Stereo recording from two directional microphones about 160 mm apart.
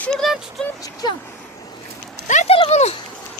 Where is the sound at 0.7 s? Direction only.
25° left (ahead or behind).